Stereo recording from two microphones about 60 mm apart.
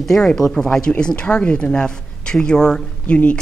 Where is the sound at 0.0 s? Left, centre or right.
Centre.